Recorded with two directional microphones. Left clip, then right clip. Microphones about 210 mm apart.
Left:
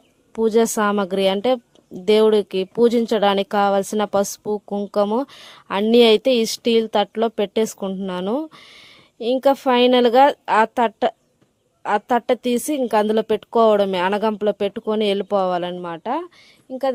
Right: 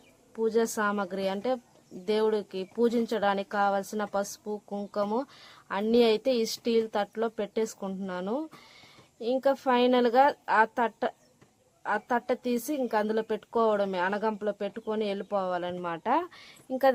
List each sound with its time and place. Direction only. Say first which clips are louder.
0.3 s speech: left 10 dB; 45° left (ahead or behind)
15.8 s speech: left 3 dB; 20° left (ahead or behind)